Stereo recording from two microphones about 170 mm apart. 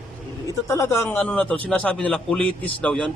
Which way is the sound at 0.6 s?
20° left (ahead or behind).